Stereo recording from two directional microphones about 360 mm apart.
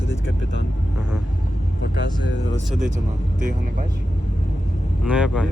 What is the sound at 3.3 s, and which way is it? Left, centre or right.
Speech, right.